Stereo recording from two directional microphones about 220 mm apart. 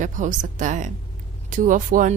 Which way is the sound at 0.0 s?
35° right (ahead or behind).